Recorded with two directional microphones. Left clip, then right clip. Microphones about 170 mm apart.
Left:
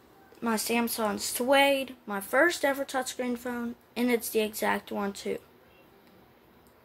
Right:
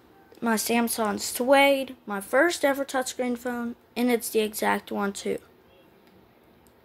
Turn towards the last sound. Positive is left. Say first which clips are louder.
# right 4 dB
turn(degrees=-25)  # may be behind; listen again after turning